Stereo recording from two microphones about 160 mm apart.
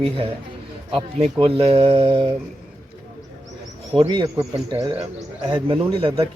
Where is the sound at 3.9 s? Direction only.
25° right (ahead or behind).